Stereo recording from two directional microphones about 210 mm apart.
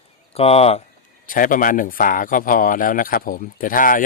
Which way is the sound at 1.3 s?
40° left (ahead or behind).